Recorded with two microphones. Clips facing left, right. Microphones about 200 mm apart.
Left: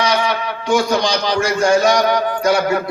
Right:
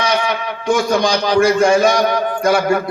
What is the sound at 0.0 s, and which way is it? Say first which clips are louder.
A man's voice: even; 55° right (ahead or behind).